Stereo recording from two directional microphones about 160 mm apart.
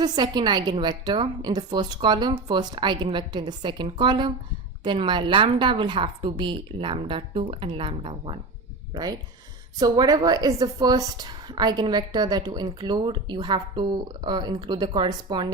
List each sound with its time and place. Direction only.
0.0 s a woman's voice: 25° right (ahead or behind)
9.7 s a woman's voice: 25° right (ahead or behind)